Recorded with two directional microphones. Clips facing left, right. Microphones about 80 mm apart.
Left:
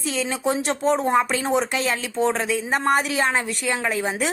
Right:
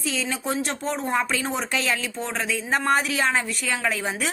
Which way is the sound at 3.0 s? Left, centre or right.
Left.